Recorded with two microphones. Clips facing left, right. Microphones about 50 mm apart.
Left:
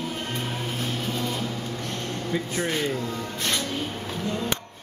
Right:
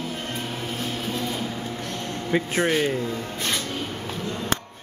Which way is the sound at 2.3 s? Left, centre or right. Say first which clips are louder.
Right 6 dB; right.